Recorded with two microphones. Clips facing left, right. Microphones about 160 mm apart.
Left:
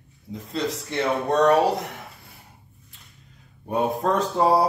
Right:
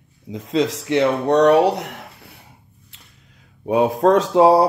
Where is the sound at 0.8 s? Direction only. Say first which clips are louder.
Right 7 dB; 90° right; by 1.9 s 70° right (ahead or behind).